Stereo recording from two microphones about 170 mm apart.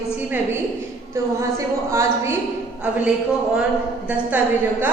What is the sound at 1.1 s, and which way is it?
A woman's voice, 15° right (ahead or behind).